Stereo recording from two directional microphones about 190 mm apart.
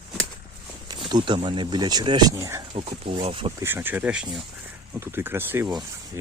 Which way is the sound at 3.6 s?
10° right (ahead or behind).